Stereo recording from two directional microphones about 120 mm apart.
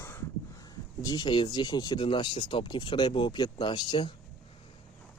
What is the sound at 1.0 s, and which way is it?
Speech, 35° left (ahead or behind).